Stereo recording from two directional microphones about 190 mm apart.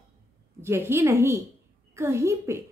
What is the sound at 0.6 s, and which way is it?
A woman's voice, 15° right (ahead or behind).